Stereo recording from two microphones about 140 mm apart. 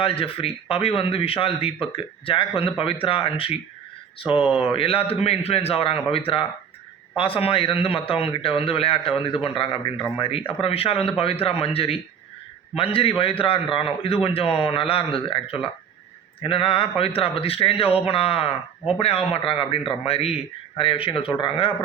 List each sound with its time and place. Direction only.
0.0 s a man's voice: 40° left (ahead or behind)